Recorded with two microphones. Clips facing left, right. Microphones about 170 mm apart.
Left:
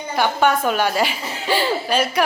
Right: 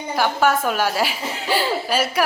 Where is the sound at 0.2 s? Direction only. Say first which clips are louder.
Left 1 dB; 5° right (ahead or behind).